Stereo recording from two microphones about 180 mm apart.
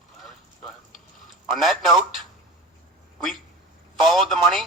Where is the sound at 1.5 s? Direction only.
Centre (ahead or behind).